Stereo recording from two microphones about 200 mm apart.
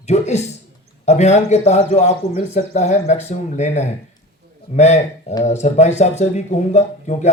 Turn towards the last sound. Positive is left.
turn(degrees=35)  # may be behind; listen again after turning